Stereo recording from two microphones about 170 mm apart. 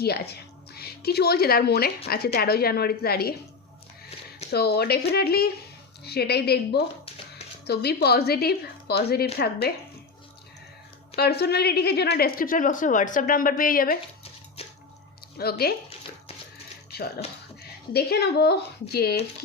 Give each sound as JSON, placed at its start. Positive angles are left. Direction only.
{"t": 0.7, "sound": "a woman's voice", "side_deg": 70}
{"t": 4.5, "sound": "a woman's voice", "side_deg": 70}
{"t": 11.2, "sound": "a woman's voice", "side_deg": 70}
{"t": 14.6, "sound": "drip", "side_deg": 35}
{"t": 15.4, "sound": "a woman's voice", "side_deg": 65}
{"t": 16.9, "sound": "a sound", "side_deg": 70}
{"t": 17.9, "sound": "a woman's voice", "side_deg": 70}